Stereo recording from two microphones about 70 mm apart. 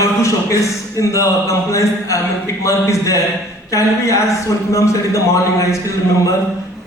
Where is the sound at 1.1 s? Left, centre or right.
Left.